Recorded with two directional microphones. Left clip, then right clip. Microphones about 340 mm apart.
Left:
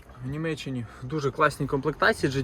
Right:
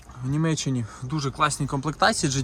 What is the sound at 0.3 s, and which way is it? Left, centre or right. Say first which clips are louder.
Speech: right 4 dB; centre.